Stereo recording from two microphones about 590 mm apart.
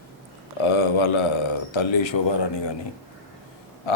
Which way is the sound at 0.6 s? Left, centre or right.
Left.